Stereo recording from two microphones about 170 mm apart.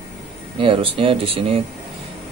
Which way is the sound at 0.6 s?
30° right (ahead or behind).